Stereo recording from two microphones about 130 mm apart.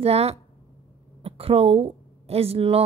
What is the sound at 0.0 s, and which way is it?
A woman's voice, 50° right (ahead or behind).